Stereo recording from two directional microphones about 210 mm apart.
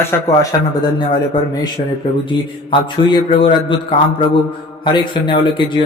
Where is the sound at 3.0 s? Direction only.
25° left (ahead or behind).